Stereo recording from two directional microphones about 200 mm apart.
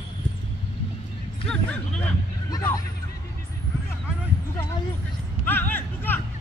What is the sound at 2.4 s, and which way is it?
Hubbub, 20° left (ahead or behind).